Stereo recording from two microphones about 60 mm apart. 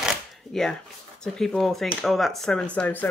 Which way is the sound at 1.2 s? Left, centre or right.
Centre.